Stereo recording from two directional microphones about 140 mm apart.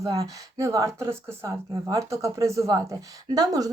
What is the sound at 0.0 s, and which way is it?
Speech, 25° right (ahead or behind).